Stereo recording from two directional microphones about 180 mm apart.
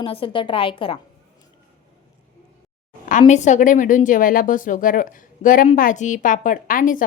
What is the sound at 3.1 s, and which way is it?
A woman's voice, 40° left (ahead or behind).